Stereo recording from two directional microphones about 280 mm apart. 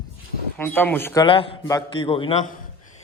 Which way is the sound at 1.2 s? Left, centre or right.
Centre.